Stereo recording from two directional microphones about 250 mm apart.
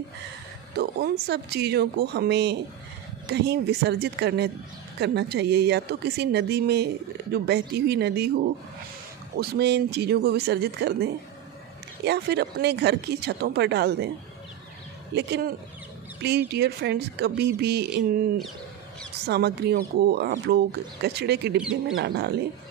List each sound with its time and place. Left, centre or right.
0.7 s a woman's voice: right
9.4 s speech: right
15.1 s speech: right
19.2 s speech: right
21.5 s speech: centre
21.9 s speech: right